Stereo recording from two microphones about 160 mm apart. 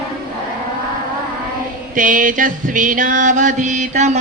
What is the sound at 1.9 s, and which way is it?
Music, 55° right (ahead or behind).